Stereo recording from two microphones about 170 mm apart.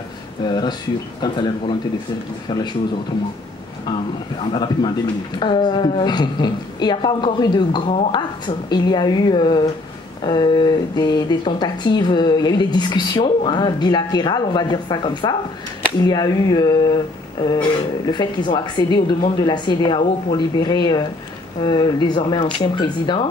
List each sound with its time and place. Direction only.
0.5 s speech: 25° left (ahead or behind)
4.5 s speech: 25° left (ahead or behind)
18.0 s speech: 25° left (ahead or behind)